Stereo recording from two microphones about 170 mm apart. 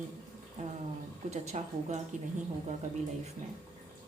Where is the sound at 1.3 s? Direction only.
40° right (ahead or behind).